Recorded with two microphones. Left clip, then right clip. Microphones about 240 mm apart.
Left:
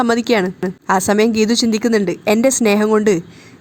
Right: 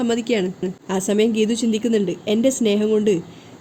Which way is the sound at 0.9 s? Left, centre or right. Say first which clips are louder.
Left 9 dB; left.